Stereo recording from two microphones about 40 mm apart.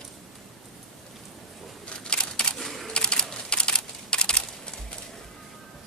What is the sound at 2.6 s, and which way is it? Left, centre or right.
Typewriter, centre.